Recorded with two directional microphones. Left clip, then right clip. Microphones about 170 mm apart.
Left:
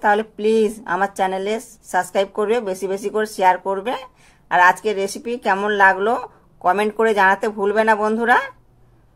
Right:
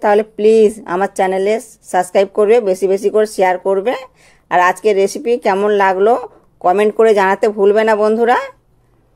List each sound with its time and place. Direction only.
0.0 s speech: 40° right (ahead or behind)